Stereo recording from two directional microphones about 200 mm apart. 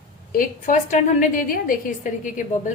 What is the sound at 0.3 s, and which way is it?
A woman's voice, 40° left (ahead or behind).